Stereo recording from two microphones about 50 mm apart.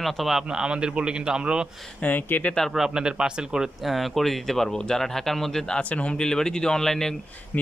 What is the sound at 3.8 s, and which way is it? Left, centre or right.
Speech, centre.